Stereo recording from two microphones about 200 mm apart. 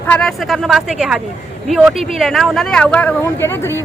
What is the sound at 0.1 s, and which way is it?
A man's voice, 5° left (ahead or behind).